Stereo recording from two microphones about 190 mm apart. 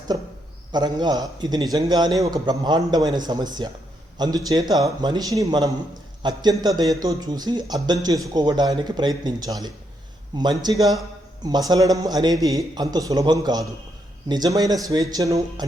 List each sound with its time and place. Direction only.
0.7 s a man's voice: 20° right (ahead or behind)